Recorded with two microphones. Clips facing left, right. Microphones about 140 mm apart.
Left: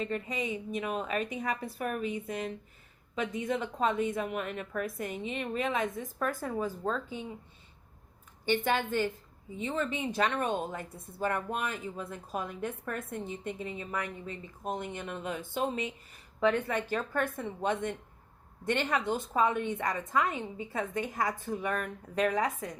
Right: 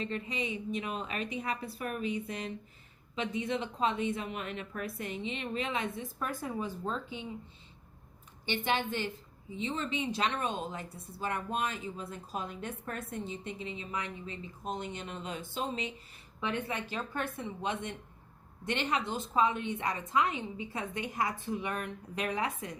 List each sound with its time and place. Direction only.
0.0 s speech: 45° left (ahead or behind)
8.4 s speech: 45° left (ahead or behind)